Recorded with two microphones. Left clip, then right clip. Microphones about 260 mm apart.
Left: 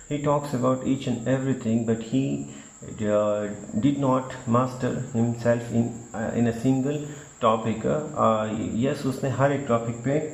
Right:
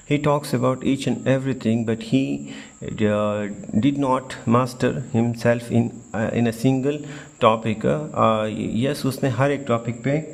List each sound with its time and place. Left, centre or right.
0.1 s speech: right